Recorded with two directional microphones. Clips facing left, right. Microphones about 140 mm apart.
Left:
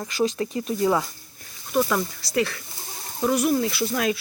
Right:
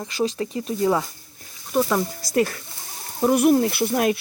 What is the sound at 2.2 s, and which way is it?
Speech, 45° right (ahead or behind).